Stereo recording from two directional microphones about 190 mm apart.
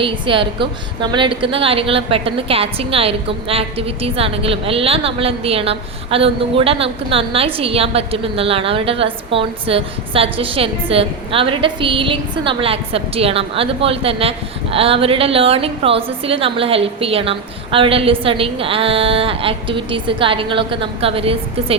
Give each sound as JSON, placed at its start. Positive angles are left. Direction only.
{"t": 0.0, "sound": "a woman's voice", "side_deg": -25}